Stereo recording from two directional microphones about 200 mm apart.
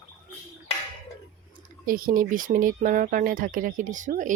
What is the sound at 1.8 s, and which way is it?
Speech, 45° right (ahead or behind).